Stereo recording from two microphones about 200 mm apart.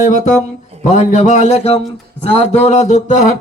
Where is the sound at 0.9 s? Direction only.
35° left (ahead or behind).